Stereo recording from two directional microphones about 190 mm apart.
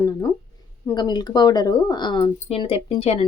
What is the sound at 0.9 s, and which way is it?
Speech, 20° left (ahead or behind).